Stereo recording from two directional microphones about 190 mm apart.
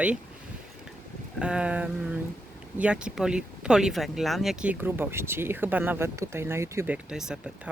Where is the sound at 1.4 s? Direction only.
5° right (ahead or behind).